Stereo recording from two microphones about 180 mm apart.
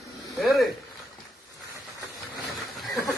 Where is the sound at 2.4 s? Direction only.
Centre (ahead or behind).